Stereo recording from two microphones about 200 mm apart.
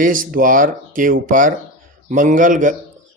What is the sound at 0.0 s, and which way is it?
Speech, 45° right (ahead or behind).